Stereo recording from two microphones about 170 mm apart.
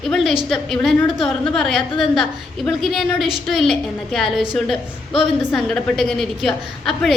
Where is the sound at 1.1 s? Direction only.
30° left (ahead or behind).